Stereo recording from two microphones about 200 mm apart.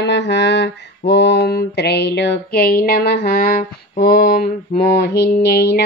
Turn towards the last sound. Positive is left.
turn(degrees=55)  # may be behind; listen again after turning